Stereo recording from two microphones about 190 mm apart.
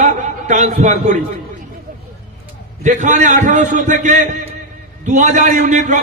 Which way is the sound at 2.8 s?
40° right (ahead or behind).